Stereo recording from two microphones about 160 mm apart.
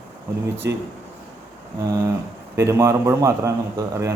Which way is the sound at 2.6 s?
20° right (ahead or behind).